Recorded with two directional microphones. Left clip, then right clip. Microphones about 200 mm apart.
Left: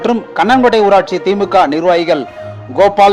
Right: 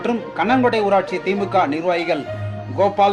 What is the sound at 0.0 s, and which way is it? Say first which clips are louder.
Speech: left 8 dB; 35° left (ahead or behind).